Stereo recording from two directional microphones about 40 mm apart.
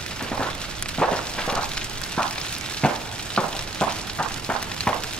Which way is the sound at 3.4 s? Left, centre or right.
Left.